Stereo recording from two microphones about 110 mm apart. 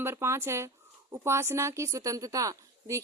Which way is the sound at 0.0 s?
25° right (ahead or behind).